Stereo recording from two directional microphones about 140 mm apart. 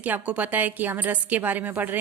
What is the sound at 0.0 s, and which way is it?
A woman's voice, 10° right (ahead or behind).